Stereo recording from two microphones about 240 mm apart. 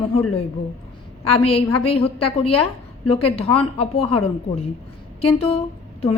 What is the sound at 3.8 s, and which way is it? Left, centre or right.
A woman's voice, left.